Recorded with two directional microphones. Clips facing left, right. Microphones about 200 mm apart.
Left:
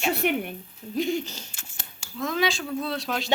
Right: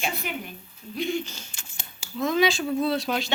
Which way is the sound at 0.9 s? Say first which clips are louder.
Left 2 dB; 40° left (ahead or behind).